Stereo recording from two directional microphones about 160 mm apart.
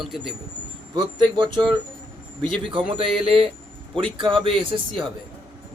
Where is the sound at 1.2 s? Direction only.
30° right (ahead or behind).